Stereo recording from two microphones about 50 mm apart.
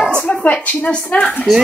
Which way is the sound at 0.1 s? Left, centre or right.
Left.